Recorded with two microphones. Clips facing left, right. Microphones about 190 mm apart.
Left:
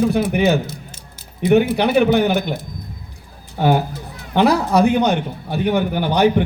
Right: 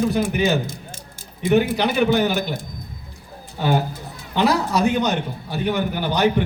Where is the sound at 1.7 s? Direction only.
55° left (ahead or behind).